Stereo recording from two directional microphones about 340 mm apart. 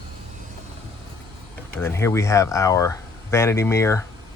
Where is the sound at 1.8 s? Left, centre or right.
Centre.